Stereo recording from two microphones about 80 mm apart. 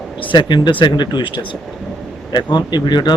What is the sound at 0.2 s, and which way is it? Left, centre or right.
Speech, left.